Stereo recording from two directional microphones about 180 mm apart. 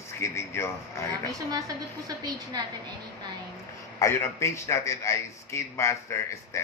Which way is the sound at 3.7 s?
15° left (ahead or behind).